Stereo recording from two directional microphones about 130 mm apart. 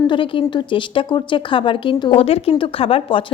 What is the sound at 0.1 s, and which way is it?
A woman's voice, 40° left (ahead or behind).